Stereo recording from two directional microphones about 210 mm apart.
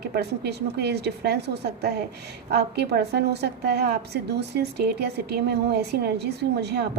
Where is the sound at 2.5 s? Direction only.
50° right (ahead or behind).